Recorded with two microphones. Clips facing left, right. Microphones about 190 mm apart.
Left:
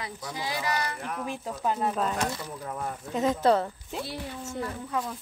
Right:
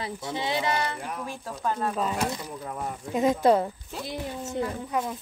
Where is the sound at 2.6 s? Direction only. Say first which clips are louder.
Right 1 dB; 5° right (ahead or behind).